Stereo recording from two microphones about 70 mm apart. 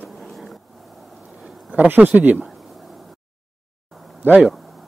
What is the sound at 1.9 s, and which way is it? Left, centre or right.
Speech, right.